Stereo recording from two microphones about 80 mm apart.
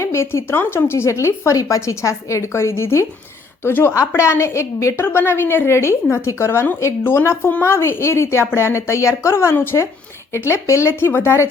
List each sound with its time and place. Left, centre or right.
0.0 s a woman's voice: left